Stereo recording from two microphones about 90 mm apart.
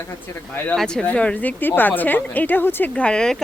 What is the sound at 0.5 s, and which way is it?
Speech, 20° left (ahead or behind).